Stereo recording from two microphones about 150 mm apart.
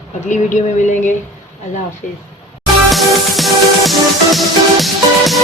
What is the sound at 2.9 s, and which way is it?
Music, centre (ahead or behind).